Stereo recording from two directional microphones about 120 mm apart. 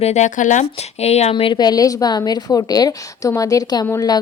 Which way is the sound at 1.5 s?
35° left (ahead or behind).